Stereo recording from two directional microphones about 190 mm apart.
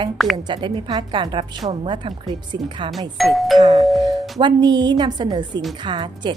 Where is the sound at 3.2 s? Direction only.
Centre (ahead or behind).